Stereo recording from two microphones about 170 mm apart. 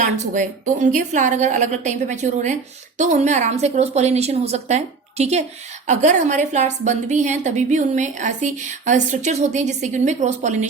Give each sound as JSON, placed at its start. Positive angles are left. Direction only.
{"t": 0.0, "sound": "a woman's voice", "side_deg": -50}